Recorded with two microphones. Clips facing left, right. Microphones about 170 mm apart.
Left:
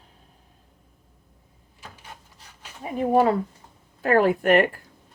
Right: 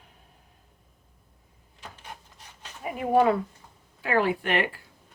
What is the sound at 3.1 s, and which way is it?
Speech, 40° left (ahead or behind).